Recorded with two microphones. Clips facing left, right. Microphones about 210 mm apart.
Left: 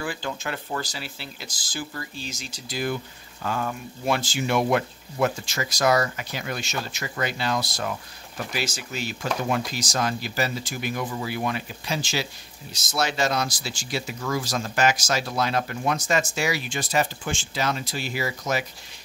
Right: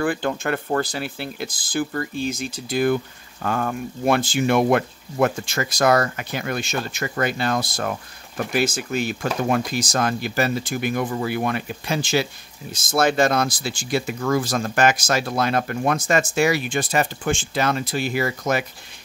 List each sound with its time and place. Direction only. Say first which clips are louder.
0.0 s speech: right 8 dB; 55° right (ahead or behind)